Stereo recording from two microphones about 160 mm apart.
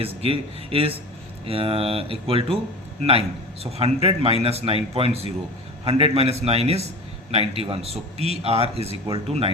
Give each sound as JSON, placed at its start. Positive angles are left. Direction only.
{"t": 0.3, "sound": "a man's voice", "side_deg": -35}